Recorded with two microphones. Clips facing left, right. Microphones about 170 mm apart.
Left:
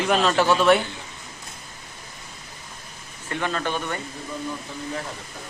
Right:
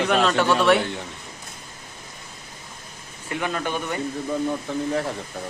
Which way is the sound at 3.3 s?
15° right (ahead or behind).